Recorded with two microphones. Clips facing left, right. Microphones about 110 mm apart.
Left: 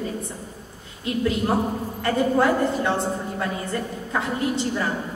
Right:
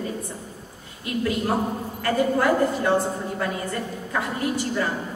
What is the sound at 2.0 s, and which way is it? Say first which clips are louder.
Speech: left 1 dB; 25° left (ahead or behind).